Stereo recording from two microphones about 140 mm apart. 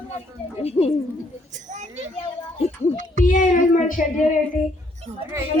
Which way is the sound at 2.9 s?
65° right (ahead or behind).